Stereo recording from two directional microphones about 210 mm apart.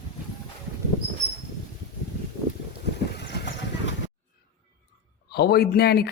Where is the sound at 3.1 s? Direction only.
55° left (ahead or behind).